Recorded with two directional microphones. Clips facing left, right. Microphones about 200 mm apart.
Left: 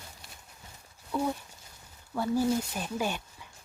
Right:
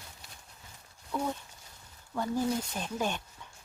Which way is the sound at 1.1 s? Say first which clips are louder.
Left 3 dB; 5° left (ahead or behind).